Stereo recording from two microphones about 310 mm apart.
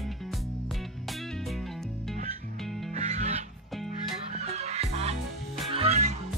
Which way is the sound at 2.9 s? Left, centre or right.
Right.